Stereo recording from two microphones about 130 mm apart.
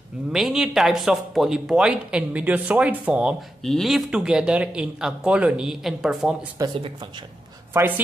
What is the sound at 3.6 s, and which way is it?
Speech, centre (ahead or behind).